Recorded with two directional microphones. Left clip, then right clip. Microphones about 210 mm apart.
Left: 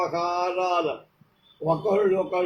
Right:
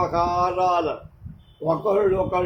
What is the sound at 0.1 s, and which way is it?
Speech, 15° right (ahead or behind).